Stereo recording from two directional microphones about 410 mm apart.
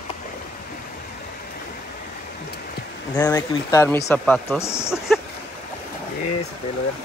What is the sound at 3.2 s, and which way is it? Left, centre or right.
Speech, centre.